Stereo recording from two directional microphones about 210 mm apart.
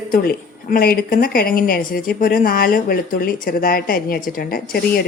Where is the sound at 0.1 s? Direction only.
45° left (ahead or behind).